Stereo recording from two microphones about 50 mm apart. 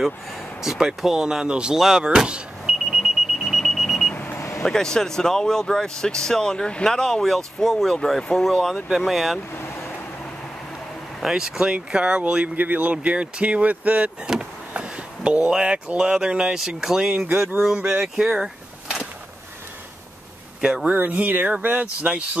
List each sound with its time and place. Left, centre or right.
0.6 s speech: centre
1.8 s vehicle: centre
4.3 s vehicle: left
4.6 s speech: centre
8.8 s speech: centre
9.7 s vehicle: left
11.2 s speech: centre
12.5 s speech: right; by 18.5 s centre
20.6 s speech: centre
20.9 s speech: right
22.0 s speech: right